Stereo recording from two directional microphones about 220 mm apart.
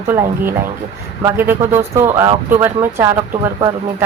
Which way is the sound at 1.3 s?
10° right (ahead or behind).